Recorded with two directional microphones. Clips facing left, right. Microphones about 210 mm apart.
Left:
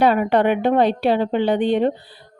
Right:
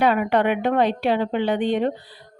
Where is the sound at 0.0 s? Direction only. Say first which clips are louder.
Left 3 dB; 35° left (ahead or behind).